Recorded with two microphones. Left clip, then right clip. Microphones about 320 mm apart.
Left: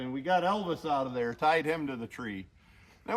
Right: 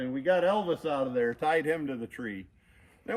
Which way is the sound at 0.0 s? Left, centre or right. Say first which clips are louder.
Right 2 dB; centre.